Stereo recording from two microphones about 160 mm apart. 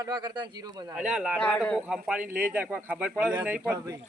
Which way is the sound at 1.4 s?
5° left (ahead or behind).